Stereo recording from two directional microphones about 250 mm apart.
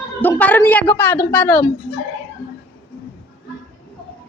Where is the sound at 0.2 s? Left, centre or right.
Centre.